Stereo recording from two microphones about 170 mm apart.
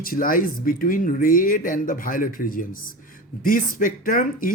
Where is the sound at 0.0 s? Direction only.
55° left (ahead or behind).